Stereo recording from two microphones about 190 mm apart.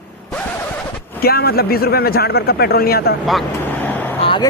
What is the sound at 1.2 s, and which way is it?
Speech, 55° left (ahead or behind).